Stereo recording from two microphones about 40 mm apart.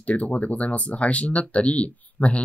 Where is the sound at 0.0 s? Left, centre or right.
Left.